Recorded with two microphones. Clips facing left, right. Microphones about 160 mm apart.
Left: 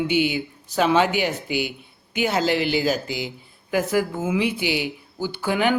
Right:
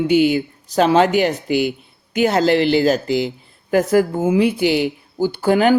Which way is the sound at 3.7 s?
45° right (ahead or behind).